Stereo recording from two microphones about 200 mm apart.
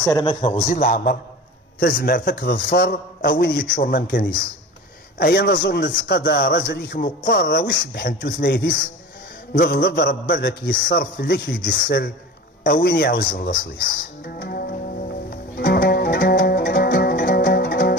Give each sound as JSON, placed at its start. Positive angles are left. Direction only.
{"t": 0.0, "sound": "a man's voice", "side_deg": 20}
{"t": 0.7, "sound": "a man's voice", "side_deg": 40}
{"t": 14.2, "sound": "music", "side_deg": 50}